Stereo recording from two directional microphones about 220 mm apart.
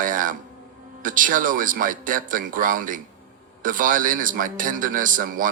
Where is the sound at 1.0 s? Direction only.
40° right (ahead or behind).